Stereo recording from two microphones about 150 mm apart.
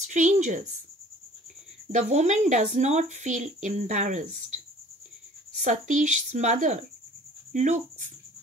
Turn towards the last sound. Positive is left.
turn(degrees=-50)  # may be behind; listen again after turning